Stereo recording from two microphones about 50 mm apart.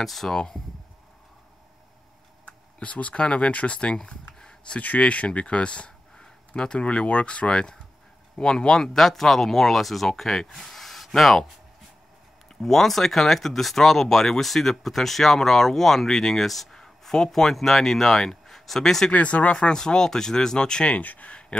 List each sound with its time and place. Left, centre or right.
0.0 s speech: centre
2.4 s speech: left
4.7 s speech: left; by 11.4 s centre
12.6 s speech: centre
19.1 s speech: left
21.0 s speech: left